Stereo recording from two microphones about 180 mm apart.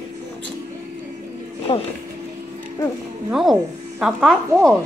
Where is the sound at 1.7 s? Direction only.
30° left (ahead or behind).